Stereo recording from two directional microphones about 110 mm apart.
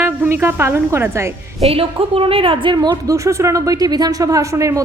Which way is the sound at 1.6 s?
60° right (ahead or behind).